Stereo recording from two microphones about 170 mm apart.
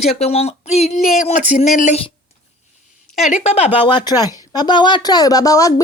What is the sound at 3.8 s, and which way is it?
Speech, 25° left (ahead or behind).